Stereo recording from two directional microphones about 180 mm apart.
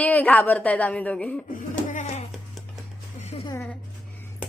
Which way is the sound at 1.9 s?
40° left (ahead or behind).